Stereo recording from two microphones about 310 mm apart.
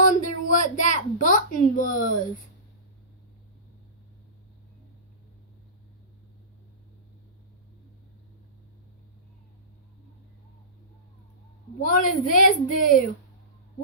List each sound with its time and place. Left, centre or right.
0.0 s speech: left
11.8 s a woman's voice: left